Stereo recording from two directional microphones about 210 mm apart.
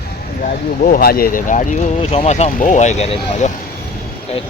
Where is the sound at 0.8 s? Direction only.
45° left (ahead or behind).